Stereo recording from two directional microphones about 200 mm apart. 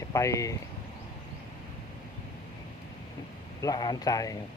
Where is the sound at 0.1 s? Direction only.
15° left (ahead or behind).